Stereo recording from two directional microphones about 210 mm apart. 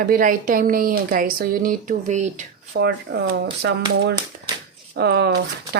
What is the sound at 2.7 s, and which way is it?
A woman's voice, 50° right (ahead or behind).